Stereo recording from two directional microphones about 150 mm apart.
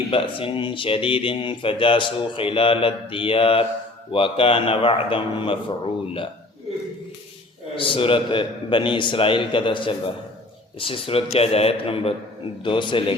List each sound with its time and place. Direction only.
0.1 s speech: 35° left (ahead or behind)
7.8 s speech: 35° left (ahead or behind)